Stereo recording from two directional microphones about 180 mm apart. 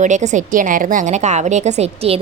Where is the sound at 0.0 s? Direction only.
45° right (ahead or behind).